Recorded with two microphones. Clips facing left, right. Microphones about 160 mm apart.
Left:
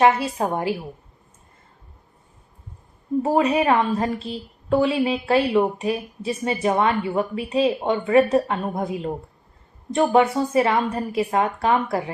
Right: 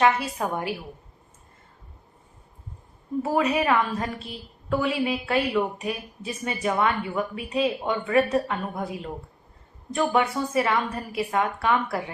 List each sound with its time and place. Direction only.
0.0 s a woman's voice: 30° left (ahead or behind)
3.2 s a woman's voice: 30° left (ahead or behind)